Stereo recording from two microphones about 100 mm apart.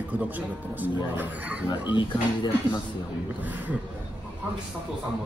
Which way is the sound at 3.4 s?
15° right (ahead or behind).